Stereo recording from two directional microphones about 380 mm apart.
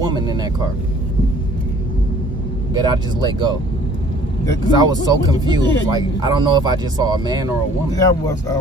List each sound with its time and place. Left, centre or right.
0.0 s a sound: centre
2.7 s speech: centre
4.6 s speech: centre
7.9 s speech: centre